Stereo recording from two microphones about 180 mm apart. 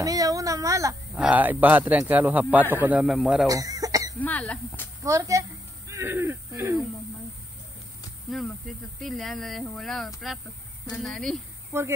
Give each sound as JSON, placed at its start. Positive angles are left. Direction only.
{"t": 0.0, "sound": "a man's voice", "side_deg": -20}
{"t": 3.4, "sound": "cough", "side_deg": -20}
{"t": 4.2, "sound": "speech", "side_deg": 10}
{"t": 5.0, "sound": "a man's voice", "side_deg": -15}
{"t": 5.9, "sound": "a sound", "side_deg": -15}
{"t": 8.3, "sound": "speech", "side_deg": 0}
{"t": 11.7, "sound": "a man's voice", "side_deg": -15}